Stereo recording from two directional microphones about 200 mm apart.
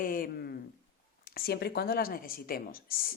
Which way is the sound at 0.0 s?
45° left (ahead or behind).